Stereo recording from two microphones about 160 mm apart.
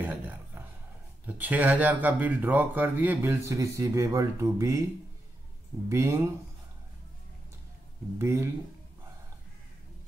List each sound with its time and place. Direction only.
0.0 s a sound: 15° right (ahead or behind)
1.2 s speech: 10° right (ahead or behind)
5.9 s speech: 20° right (ahead or behind)
8.2 s speech: 20° right (ahead or behind)